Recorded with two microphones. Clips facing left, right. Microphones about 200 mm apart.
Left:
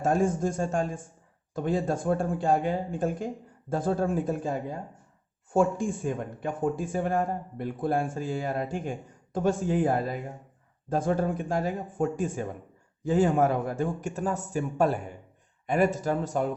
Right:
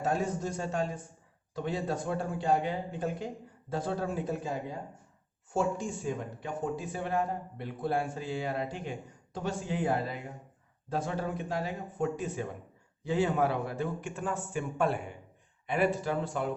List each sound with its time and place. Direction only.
0.0 s a man's voice: 50° left (ahead or behind)
5.5 s a man's voice: 55° left (ahead or behind)